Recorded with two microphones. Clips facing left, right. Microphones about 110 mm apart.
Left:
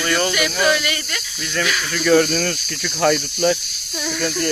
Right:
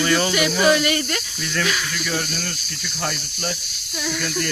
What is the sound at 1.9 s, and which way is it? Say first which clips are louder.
Speech: left 11 dB; 70° left (ahead or behind).